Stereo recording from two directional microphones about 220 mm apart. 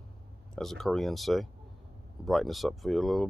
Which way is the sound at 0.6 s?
Centre (ahead or behind).